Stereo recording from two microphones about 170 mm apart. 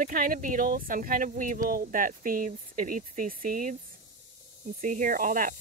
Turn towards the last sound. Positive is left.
turn(degrees=-50)  # may be behind; listen again after turning